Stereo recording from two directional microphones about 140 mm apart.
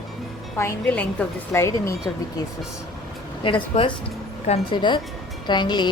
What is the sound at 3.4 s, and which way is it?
Speech, 40° left (ahead or behind).